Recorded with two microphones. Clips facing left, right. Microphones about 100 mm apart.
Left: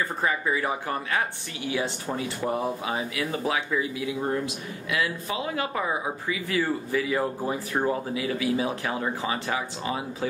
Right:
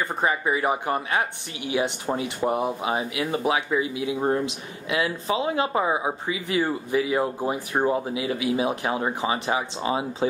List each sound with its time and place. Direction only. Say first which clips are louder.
0.2 s speech: right 4 dB; 20° right (ahead or behind)